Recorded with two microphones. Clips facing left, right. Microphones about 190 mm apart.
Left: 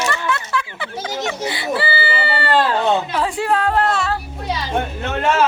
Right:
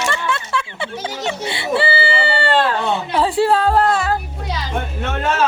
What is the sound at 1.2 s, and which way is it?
Baby cry, 25° right (ahead or behind).